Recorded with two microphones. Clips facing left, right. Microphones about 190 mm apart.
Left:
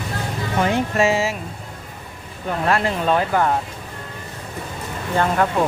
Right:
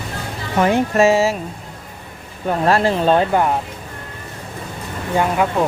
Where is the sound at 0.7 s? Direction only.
45° right (ahead or behind).